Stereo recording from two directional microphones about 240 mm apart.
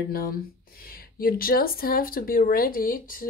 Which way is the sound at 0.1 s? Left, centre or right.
Left.